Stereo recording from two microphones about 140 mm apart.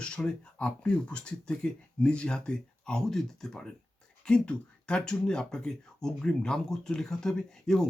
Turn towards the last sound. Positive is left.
turn(degrees=5)  # may be behind; listen again after turning